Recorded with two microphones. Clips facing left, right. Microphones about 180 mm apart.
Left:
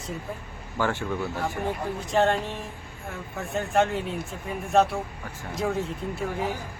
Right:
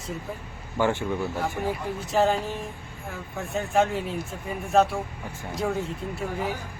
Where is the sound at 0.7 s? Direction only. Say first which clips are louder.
Right 3 dB; 15° right (ahead or behind).